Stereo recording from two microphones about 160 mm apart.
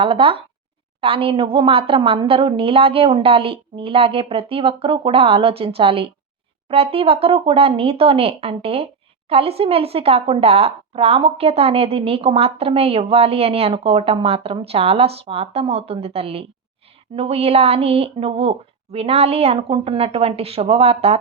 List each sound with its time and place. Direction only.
0.0 s speech: 35° right (ahead or behind)